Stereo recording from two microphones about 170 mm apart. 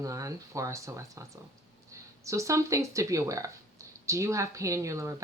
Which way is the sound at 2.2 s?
20° right (ahead or behind).